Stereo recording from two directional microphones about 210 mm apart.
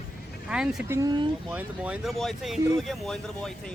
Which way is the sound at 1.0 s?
20° right (ahead or behind).